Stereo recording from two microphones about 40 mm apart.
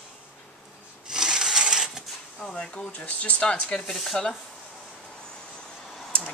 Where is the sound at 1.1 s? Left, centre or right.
Centre.